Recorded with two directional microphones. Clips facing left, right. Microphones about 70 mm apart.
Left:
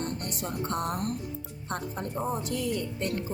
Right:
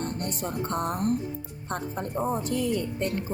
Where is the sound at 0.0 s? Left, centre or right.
Right.